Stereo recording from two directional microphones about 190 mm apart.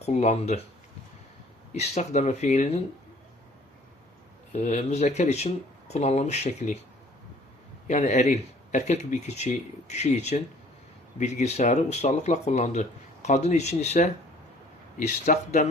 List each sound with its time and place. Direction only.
0.0 s speech: 35° left (ahead or behind)
1.7 s speech: 35° left (ahead or behind)
4.5 s speech: 35° left (ahead or behind)
7.9 s speech: 40° left (ahead or behind)